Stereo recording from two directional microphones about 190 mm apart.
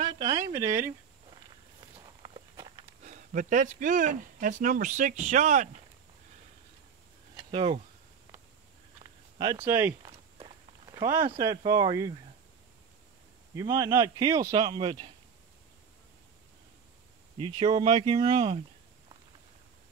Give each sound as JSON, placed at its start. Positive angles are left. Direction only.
{"t": 0.1, "sound": "speech", "side_deg": -20}
{"t": 2.0, "sound": "walk", "side_deg": -25}
{"t": 3.0, "sound": "speech", "side_deg": -40}
{"t": 7.3, "sound": "speech", "side_deg": -25}
{"t": 9.0, "sound": "a sound", "side_deg": -20}
{"t": 10.0, "sound": "walk", "side_deg": -25}
{"t": 11.2, "sound": "speech", "side_deg": -15}
{"t": 13.6, "sound": "speech", "side_deg": -15}
{"t": 17.4, "sound": "speech", "side_deg": -25}